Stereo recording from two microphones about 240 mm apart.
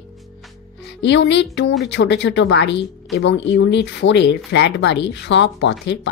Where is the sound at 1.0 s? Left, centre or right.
Left.